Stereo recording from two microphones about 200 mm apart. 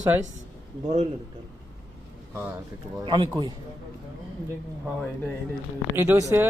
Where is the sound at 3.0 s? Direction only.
25° right (ahead or behind).